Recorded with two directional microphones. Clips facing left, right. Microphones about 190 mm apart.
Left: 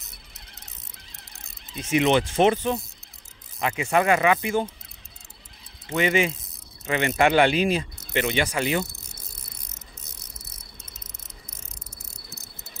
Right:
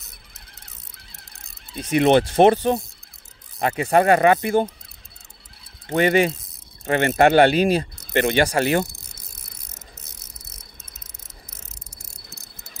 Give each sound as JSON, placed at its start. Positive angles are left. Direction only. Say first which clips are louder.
{"t": 1.8, "sound": "speech", "louder": "right 4 dB", "side_deg": -40}
{"t": 5.9, "sound": "speech", "louder": "right 5 dB", "side_deg": -45}